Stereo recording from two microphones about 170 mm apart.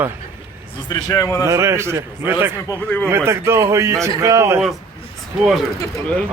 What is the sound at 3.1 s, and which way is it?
A man's voice, 15° right (ahead or behind).